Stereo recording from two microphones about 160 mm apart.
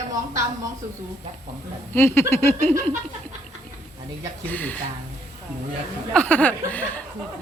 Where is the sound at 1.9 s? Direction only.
15° left (ahead or behind).